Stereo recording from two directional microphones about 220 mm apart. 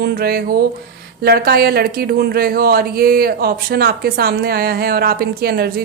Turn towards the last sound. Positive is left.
turn(degrees=-45)  # may be behind; listen again after turning